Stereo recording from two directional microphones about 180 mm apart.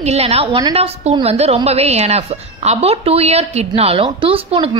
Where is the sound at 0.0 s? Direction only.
35° right (ahead or behind).